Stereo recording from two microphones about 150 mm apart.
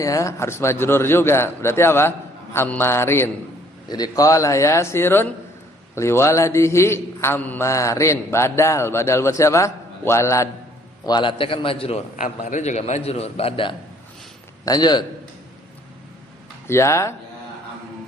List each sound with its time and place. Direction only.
0.0 s a man's voice: 20° left (ahead or behind)
3.8 s a man's voice: 25° left (ahead or behind)
11.0 s a man's voice: 30° left (ahead or behind)
12.1 s a man's voice: 60° left (ahead or behind); by 13.7 s 40° left (ahead or behind)
14.6 s a man's voice: 25° left (ahead or behind)
16.6 s a man's voice: 20° left (ahead or behind)